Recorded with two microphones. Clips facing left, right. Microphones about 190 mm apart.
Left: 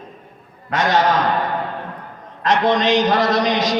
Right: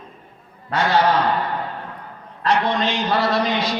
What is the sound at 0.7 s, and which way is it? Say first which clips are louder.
Speech: left 1 dB; 45° left (ahead or behind).